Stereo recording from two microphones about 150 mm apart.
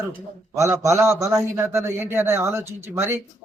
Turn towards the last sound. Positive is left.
turn(degrees=-15)  # may be behind; listen again after turning